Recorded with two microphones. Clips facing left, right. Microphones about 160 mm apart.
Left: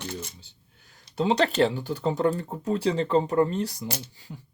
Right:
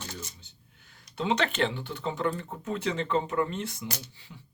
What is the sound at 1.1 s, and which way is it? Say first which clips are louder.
Speech: left 5 dB; 35° left (ahead or behind).